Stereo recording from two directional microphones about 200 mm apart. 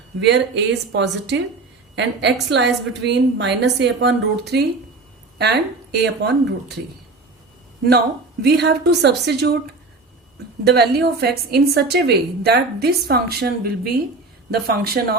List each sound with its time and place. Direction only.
0.2 s a woman's voice: 60° right (ahead or behind)
7.9 s a woman's voice: 55° right (ahead or behind)
10.6 s a woman's voice: 55° right (ahead or behind)